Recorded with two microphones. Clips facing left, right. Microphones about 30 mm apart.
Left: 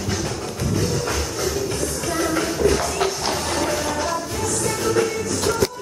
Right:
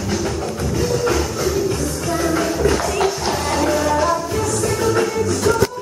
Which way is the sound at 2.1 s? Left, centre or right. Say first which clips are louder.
Right 3 dB; centre.